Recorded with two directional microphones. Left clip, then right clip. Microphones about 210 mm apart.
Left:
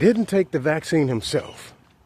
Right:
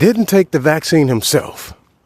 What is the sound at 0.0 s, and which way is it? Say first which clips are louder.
Speech: right 6 dB; 50° right (ahead or behind).